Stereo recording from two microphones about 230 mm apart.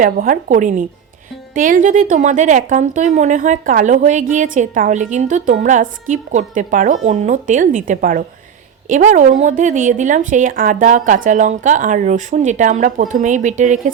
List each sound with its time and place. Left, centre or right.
0.0 s a woman's voice: right